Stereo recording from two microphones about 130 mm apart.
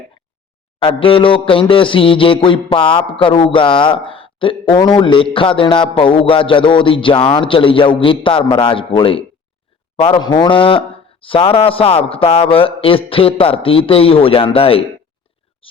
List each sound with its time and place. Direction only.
0.8 s a man's voice: 40° left (ahead or behind)
10.2 s a man's voice: 35° left (ahead or behind)